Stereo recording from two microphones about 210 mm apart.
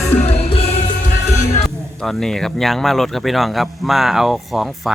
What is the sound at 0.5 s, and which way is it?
Music, 30° left (ahead or behind).